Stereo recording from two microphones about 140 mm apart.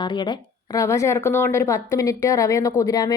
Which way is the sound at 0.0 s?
30° left (ahead or behind).